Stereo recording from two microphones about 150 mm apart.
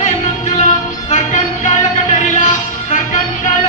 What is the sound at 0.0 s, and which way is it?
Music, 50° left (ahead or behind).